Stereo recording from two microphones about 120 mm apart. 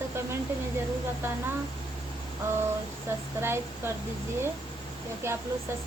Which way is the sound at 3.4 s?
20° right (ahead or behind).